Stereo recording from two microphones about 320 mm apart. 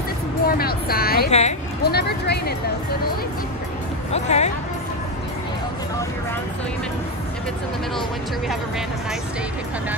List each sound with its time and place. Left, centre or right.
0.5 s speech: left
4.1 s speech: left